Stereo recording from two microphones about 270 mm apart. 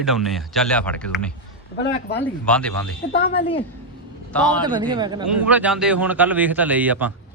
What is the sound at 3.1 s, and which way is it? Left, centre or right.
Speech, left.